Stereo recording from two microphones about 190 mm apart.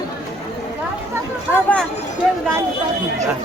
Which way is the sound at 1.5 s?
5° left (ahead or behind).